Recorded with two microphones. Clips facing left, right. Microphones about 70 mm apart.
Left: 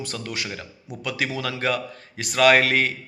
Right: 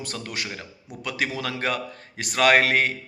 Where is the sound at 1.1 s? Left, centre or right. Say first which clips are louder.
Left 1 dB; right.